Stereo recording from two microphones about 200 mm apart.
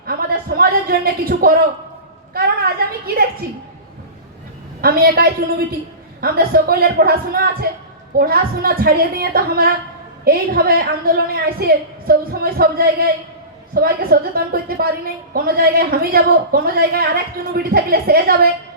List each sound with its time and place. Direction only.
0.0 s speech: 50° right (ahead or behind)
2.3 s a sound: 50° right (ahead or behind)
4.8 s a woman's voice: 50° right (ahead or behind)